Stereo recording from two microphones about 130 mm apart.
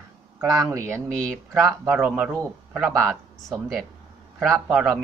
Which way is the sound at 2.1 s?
20° right (ahead or behind).